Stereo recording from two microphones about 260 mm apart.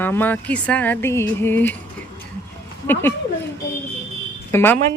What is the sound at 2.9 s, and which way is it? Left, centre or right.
Speech, centre.